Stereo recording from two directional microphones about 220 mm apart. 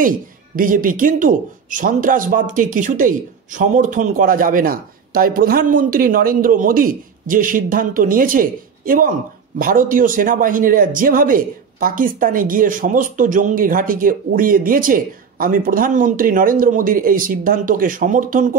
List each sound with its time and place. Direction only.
0.6 s a man's voice: 40° right (ahead or behind)